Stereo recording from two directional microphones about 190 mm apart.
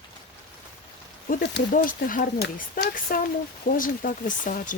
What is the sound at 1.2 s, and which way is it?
Speech, 65° left (ahead or behind).